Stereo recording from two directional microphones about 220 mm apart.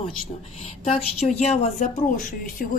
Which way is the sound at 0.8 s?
30° left (ahead or behind).